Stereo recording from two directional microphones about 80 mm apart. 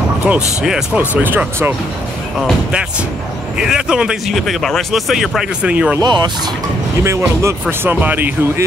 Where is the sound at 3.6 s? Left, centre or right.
Centre.